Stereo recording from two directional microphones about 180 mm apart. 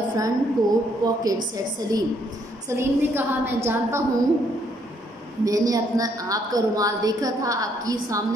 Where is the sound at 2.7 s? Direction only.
10° right (ahead or behind).